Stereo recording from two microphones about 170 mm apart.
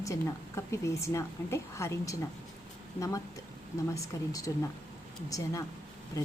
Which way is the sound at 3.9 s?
20° left (ahead or behind).